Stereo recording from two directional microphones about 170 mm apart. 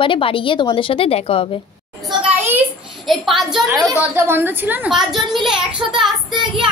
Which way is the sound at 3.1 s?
Centre (ahead or behind).